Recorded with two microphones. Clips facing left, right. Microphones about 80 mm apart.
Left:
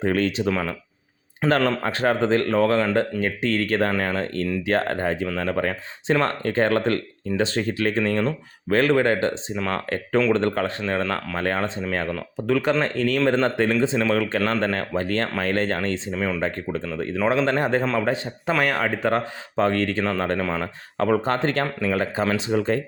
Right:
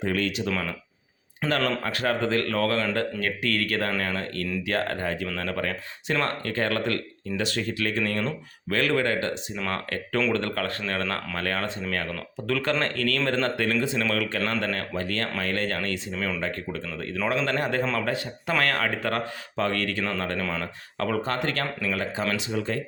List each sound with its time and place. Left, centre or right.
0.0 s speech: left
16.1 s speech: centre
16.4 s speech: left
20.4 s speech: centre
21.0 s speech: left